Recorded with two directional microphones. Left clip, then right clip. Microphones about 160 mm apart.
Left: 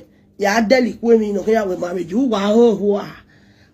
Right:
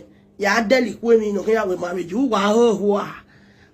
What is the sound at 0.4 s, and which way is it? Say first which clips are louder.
Speech: left 2 dB; 45° left (ahead or behind).